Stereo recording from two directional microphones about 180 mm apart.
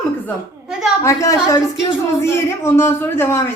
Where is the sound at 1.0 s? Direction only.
20° left (ahead or behind).